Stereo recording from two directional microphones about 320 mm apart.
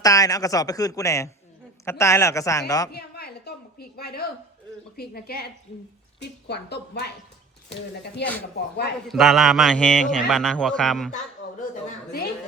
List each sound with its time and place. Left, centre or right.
0.0 s speech: centre
2.9 s a sound: left
4.9 s a woman's voice: left
6.5 s a woman's voice: left
8.2 s a woman's voice: left
9.0 s a man's voice: centre
11.4 s a sound: left